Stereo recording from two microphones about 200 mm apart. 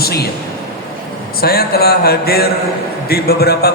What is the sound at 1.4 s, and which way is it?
A man's voice, 50° left (ahead or behind).